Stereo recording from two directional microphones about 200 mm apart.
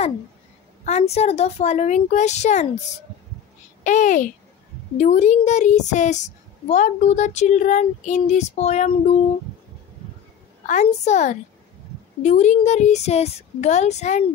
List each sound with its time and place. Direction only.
0.8 s a woman's voice: 35° left (ahead or behind)
10.7 s a woman's voice: 35° left (ahead or behind)